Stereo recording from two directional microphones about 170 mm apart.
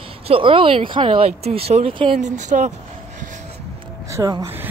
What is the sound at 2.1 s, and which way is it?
Speech, 45° right (ahead or behind).